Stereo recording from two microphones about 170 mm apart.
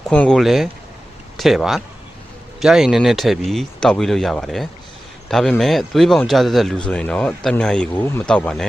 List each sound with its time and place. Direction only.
0.0 s speech: 5° left (ahead or behind)